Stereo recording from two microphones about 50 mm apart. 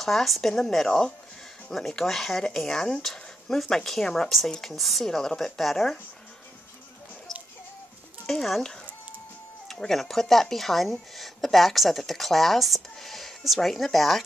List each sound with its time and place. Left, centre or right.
0.0 s speech: centre
4.7 s speech: centre
8.3 s speech: centre
9.7 s speech: centre